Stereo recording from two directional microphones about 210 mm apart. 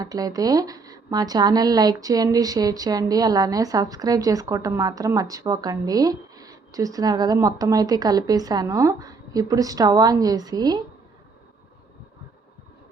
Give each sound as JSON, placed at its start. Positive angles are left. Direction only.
{"t": 0.0, "sound": "speech", "side_deg": -15}